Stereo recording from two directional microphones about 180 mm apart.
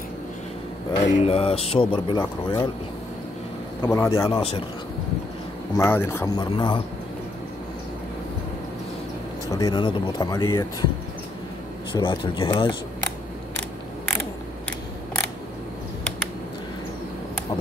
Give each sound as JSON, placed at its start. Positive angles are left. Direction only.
{"t": 1.0, "sound": "speech", "side_deg": 40}
{"t": 3.8, "sound": "speech", "side_deg": 15}
{"t": 4.4, "sound": "speech", "side_deg": 35}
{"t": 5.8, "sound": "speech", "side_deg": 15}
{"t": 9.5, "sound": "speech", "side_deg": 20}
{"t": 12.0, "sound": "speech", "side_deg": 25}